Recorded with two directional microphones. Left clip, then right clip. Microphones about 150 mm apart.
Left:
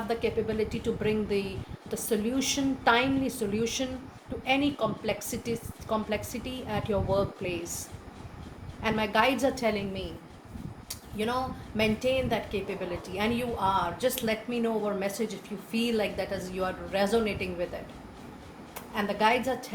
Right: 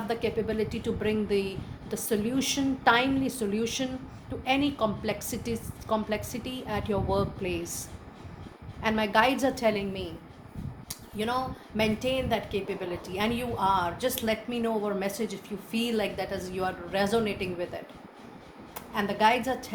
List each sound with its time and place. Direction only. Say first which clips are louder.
0.1 s speech: even; 50° right (ahead or behind)
10.8 s a sound: even; 55° right (ahead or behind)
11.8 s a woman's voice: left 1 dB; 55° right (ahead or behind)
18.7 s a woman's voice: right 1 dB; 55° right (ahead or behind)